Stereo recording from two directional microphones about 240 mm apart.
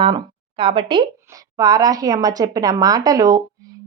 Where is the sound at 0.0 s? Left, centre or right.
Right.